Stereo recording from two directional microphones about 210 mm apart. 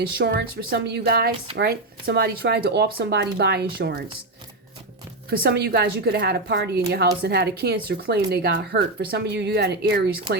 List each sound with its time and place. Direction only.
0.0 s speech: 50° right (ahead or behind)
5.4 s speech: 50° right (ahead or behind)